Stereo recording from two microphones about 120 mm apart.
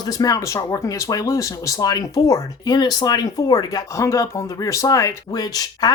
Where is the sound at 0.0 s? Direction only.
30° left (ahead or behind).